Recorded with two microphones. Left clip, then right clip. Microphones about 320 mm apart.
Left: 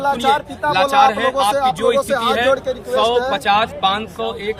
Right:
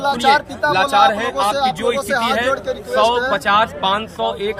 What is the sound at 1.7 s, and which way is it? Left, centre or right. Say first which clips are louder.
Speech: left 3 dB; centre.